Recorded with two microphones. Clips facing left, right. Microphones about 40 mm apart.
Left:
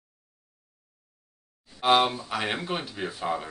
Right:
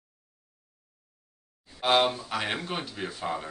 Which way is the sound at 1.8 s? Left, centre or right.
Centre.